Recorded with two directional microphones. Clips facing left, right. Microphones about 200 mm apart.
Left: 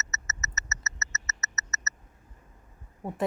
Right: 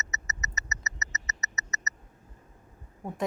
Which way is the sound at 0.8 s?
15° right (ahead or behind).